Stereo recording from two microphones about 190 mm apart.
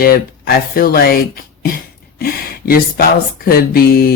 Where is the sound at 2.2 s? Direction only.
50° left (ahead or behind).